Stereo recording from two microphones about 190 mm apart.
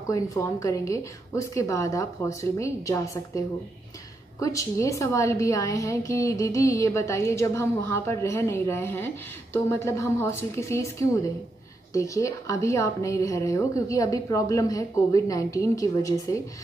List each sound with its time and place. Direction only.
0.1 s a woman's voice: 15° left (ahead or behind)